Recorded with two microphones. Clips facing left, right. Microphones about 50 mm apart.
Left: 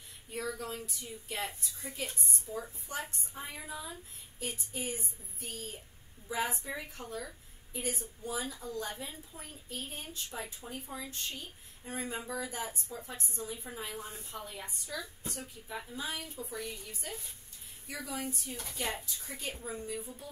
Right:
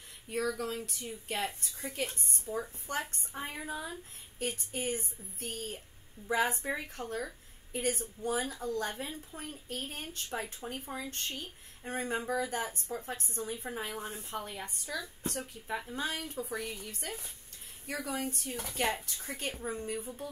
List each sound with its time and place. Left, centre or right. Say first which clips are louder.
0.3 s a woman's voice: right 4 dB; right